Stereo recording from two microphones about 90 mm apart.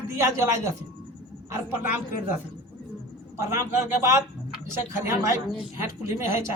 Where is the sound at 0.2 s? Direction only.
30° right (ahead or behind).